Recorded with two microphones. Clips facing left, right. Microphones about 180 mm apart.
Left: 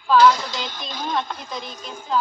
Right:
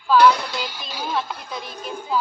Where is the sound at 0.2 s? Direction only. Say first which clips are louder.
Even; 60° right (ahead or behind).